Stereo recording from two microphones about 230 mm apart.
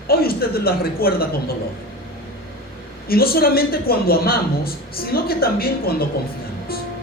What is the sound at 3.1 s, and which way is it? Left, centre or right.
Speech, left.